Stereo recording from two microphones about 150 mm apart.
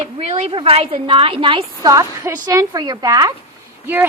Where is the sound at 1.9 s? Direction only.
20° right (ahead or behind).